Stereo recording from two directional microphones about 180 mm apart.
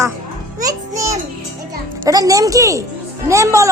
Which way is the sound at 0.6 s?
20° right (ahead or behind).